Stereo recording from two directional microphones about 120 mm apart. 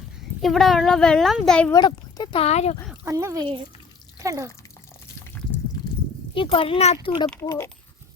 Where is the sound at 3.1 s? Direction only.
25° right (ahead or behind).